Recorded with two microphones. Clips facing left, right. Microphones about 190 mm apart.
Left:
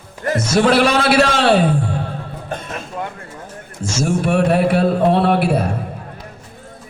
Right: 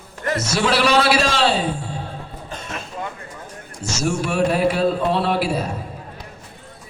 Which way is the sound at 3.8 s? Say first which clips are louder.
Left 4 dB; 50° left (ahead or behind).